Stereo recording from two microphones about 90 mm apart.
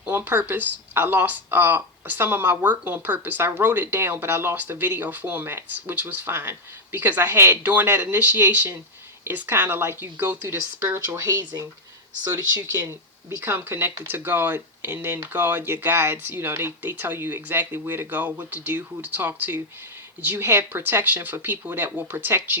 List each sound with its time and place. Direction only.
0.0 s speech: 25° right (ahead or behind)
13.4 s speech: 25° right (ahead or behind)